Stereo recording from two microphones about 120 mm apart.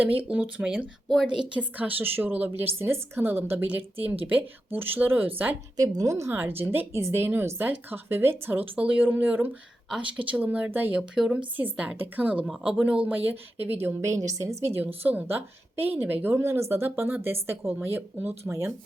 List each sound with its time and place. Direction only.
0.0 s speech: 15° right (ahead or behind)
1.0 s a woman's voice: 5° left (ahead or behind)
1.5 s speech: 15° right (ahead or behind)
5.7 s a woman's voice: 30° right (ahead or behind); by 13.3 s 15° right (ahead or behind)
13.8 s a woman's voice: 25° right (ahead or behind)